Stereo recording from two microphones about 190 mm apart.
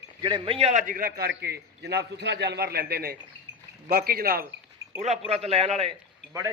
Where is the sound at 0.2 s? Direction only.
25° right (ahead or behind); by 4.4 s 50° right (ahead or behind).